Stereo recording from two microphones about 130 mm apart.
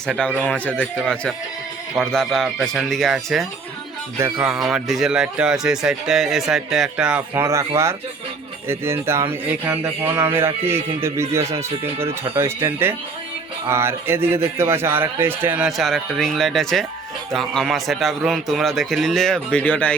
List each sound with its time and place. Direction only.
0.1 s speech: 5° left (ahead or behind)
0.7 s a man's voice: 10° right (ahead or behind)
1.0 s speech: 10° left (ahead or behind)
4.4 s speech: 5° right (ahead or behind)
8.6 s a man's voice: 20° right (ahead or behind)
15.8 s speech: centre (ahead or behind)